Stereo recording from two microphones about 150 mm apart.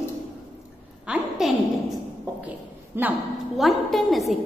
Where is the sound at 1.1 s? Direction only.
5° right (ahead or behind).